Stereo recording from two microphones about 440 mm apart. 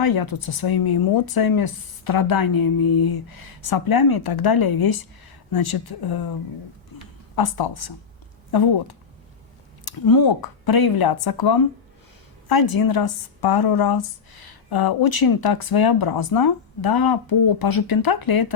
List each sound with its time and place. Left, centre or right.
0.0 s a woman's voice: left
7.3 s a woman's voice: left